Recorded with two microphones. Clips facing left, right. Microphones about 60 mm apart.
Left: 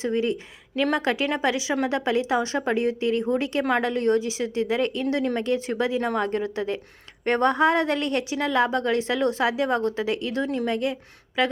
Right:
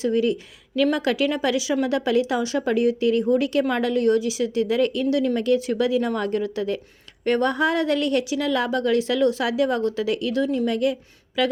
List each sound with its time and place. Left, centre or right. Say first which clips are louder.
0.0 s a woman's voice: right 3 dB; left